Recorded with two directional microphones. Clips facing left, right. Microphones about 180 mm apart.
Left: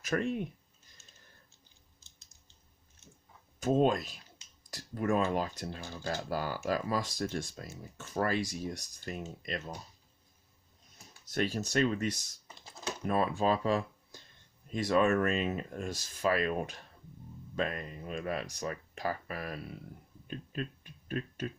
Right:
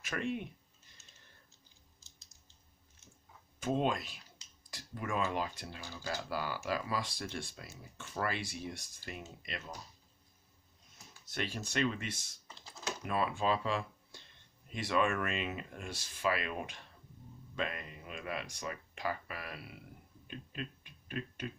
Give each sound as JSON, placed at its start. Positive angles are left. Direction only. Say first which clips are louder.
{"t": 0.0, "sound": "speech", "louder": "left 5 dB", "side_deg": 40}
{"t": 3.6, "sound": "speech", "louder": "left 6 dB", "side_deg": 40}
{"t": 11.3, "sound": "speech", "louder": "left 7 dB", "side_deg": 40}
{"t": 20.2, "sound": "a sound", "louder": "left 5 dB", "side_deg": 40}